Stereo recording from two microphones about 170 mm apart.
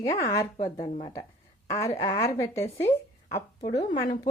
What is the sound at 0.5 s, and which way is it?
Speech, 35° left (ahead or behind).